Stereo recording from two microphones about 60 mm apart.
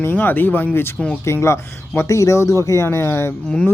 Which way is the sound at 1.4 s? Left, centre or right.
Left.